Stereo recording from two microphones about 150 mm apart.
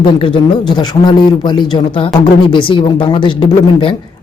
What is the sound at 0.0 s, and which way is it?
Speech, 35° left (ahead or behind).